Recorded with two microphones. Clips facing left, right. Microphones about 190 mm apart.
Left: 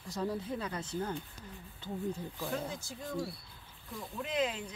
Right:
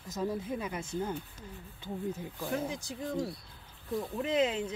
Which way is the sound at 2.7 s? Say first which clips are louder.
Right 4 dB; 15° right (ahead or behind).